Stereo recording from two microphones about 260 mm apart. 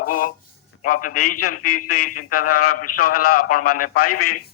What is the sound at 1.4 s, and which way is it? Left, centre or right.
A man's voice, left.